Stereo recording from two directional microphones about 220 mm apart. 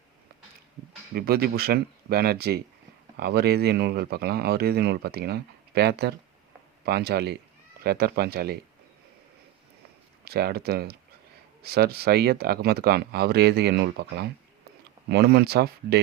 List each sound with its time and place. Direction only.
1.1 s speech: 45° right (ahead or behind)
10.2 s speech: 45° right (ahead or behind)